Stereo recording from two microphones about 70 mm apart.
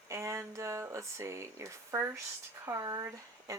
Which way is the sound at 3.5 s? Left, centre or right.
Right.